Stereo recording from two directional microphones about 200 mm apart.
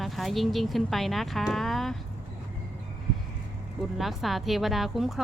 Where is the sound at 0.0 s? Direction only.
Centre (ahead or behind).